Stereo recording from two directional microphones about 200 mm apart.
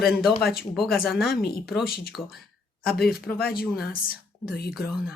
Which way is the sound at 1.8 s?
50° left (ahead or behind).